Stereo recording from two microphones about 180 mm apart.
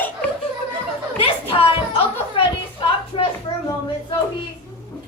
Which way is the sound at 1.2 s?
30° left (ahead or behind).